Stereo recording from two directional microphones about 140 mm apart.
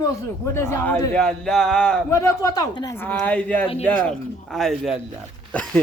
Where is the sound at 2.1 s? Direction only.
20° left (ahead or behind).